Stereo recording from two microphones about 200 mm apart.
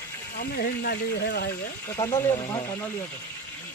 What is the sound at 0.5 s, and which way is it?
Speech, 50° left (ahead or behind).